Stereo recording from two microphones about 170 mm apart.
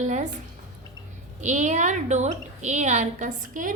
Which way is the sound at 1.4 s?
45° right (ahead or behind).